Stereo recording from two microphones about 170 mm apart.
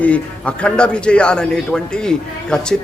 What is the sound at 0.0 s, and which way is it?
A man's voice, 5° left (ahead or behind).